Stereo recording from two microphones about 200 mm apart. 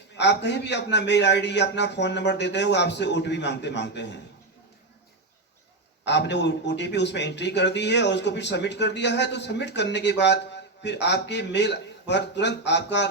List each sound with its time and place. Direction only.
0.2 s a man's voice: 60° left (ahead or behind)
6.1 s a man's voice: 60° left (ahead or behind)